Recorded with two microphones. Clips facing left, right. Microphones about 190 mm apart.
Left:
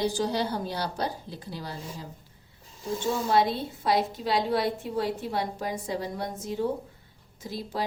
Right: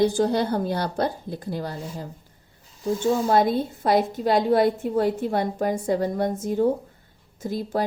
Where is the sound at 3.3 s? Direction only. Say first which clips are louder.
Right 4 dB; 50° right (ahead or behind).